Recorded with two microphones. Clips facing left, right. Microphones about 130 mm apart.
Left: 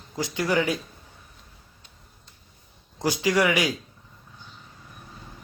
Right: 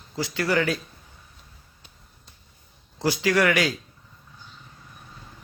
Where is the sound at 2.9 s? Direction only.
15° left (ahead or behind).